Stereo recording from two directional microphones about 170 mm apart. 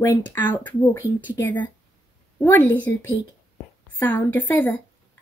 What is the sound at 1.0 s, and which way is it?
Speech, 10° right (ahead or behind).